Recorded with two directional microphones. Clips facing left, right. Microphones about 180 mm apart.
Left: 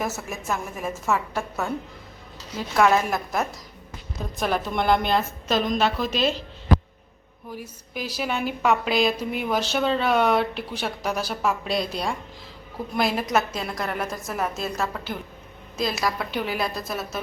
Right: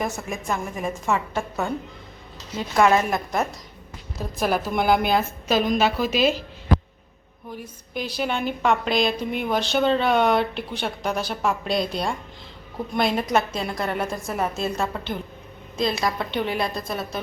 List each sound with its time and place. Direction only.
0.0 s speech: 5° left (ahead or behind)
7.5 s speech: 5° left (ahead or behind)